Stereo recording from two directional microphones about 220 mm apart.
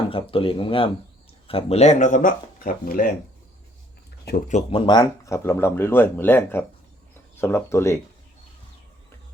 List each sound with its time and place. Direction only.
0.1 s speech: 25° left (ahead or behind); by 3.1 s 40° left (ahead or behind)
4.3 s speech: 40° left (ahead or behind)
4.9 s speech: 15° left (ahead or behind)